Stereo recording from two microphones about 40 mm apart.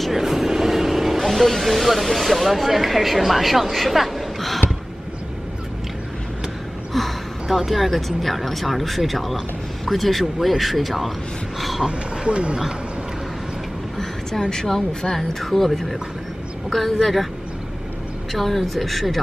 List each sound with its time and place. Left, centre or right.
0.1 s speech: centre
6.9 s gasp: centre
7.5 s speech: centre
12.3 s speech: right
14.5 s speech: centre
18.3 s speech: centre